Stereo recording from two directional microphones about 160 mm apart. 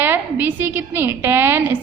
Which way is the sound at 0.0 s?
10° right (ahead or behind).